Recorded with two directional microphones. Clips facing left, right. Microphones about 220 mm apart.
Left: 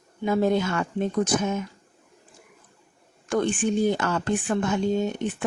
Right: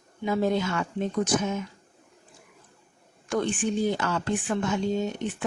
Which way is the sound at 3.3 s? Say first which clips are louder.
Left 3 dB; 55° left (ahead or behind).